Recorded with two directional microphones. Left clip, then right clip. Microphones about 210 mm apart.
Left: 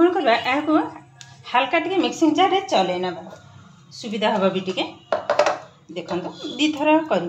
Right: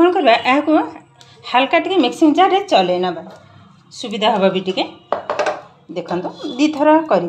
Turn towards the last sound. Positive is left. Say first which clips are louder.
# right 6 dB
turn(degrees=-35)  # may be behind; listen again after turning